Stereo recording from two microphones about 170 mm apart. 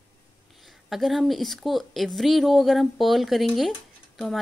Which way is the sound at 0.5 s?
Centre (ahead or behind).